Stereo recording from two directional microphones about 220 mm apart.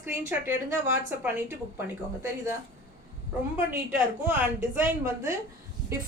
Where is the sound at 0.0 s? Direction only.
10° right (ahead or behind).